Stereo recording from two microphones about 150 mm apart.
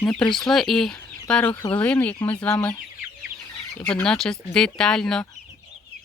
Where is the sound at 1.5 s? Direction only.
30° left (ahead or behind).